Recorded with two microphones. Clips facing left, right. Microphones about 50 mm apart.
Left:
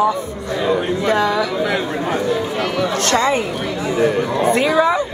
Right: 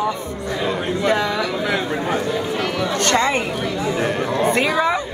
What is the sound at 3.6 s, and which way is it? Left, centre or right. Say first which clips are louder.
A man's voice: left 3 dB; centre.